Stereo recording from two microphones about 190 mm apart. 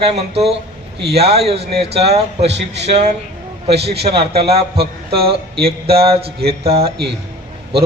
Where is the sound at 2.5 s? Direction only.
65° right (ahead or behind).